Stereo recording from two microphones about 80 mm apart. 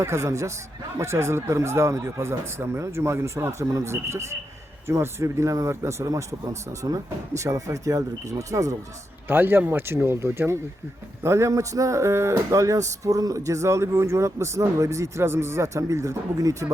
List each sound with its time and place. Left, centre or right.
0.0 s speech: right
9.2 s speech: right